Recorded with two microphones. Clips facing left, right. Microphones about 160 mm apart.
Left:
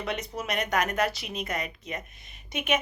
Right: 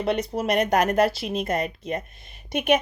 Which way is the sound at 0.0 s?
35° right (ahead or behind).